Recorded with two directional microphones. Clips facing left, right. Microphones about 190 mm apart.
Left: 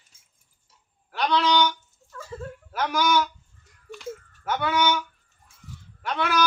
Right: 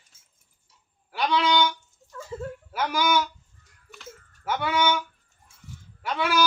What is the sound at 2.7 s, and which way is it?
Speech, 10° right (ahead or behind).